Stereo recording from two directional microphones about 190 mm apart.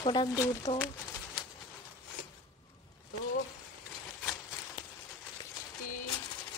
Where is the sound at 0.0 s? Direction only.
25° left (ahead or behind).